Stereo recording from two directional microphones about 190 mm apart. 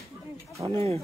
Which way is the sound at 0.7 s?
30° right (ahead or behind).